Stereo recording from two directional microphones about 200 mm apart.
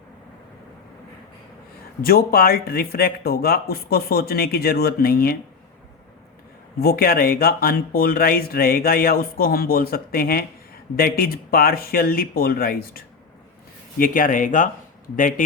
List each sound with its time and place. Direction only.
2.0 s speech: 50° left (ahead or behind)
6.7 s speech: 50° left (ahead or behind)
14.0 s speech: 45° left (ahead or behind)